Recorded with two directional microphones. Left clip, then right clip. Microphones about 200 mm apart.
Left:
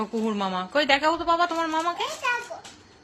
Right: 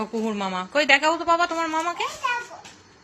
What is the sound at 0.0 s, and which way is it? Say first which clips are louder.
A woman's voice: even; 10° left (ahead or behind).